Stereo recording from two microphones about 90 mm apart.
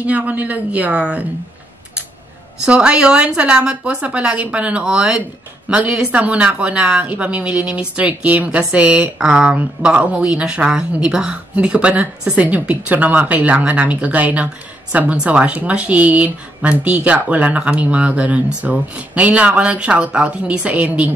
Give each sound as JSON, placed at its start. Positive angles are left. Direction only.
{"t": 0.0, "sound": "a woman's voice", "side_deg": -15}
{"t": 2.6, "sound": "a woman's voice", "side_deg": -10}